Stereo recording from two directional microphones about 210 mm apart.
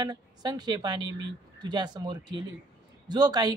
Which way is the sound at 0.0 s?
20° right (ahead or behind).